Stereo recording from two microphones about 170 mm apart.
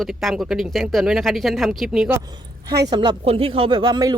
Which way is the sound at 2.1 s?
25° right (ahead or behind).